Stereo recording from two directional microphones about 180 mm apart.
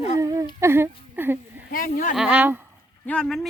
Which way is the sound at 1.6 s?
50° left (ahead or behind).